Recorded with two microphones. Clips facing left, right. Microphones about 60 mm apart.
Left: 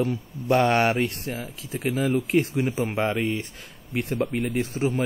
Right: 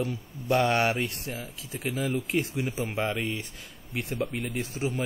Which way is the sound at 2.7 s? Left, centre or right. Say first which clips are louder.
Left 5 dB; left.